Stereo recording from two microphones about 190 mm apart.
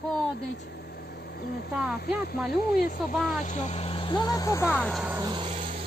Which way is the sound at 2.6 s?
50° left (ahead or behind).